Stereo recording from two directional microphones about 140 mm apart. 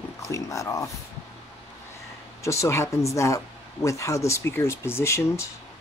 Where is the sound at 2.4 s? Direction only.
20° left (ahead or behind).